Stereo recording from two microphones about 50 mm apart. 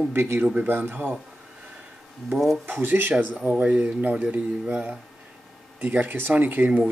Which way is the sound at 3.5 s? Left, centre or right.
Right.